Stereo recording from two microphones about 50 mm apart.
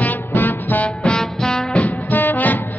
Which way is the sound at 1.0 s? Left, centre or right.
Centre.